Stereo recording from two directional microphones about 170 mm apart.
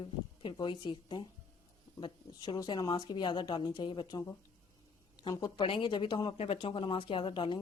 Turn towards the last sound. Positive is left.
turn(degrees=30)  # may be behind; listen again after turning